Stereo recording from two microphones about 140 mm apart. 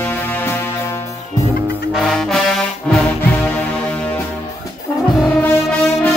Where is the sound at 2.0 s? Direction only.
Centre (ahead or behind).